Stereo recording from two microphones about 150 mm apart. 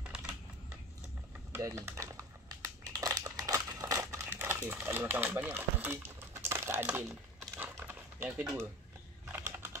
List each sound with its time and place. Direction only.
0.1 s typing: 5° right (ahead or behind)
1.5 s crumpling: 20° right (ahead or behind)
9.2 s typing: 15° right (ahead or behind)